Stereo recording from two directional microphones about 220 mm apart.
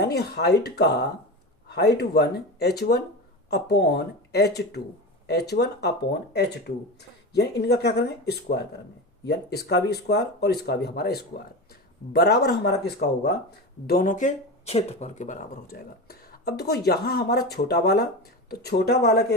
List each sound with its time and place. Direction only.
0.0 s speech: 50° left (ahead or behind)